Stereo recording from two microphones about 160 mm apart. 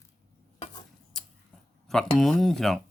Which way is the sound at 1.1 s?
5° left (ahead or behind).